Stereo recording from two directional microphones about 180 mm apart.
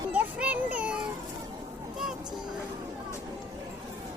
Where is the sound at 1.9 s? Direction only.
Centre (ahead or behind).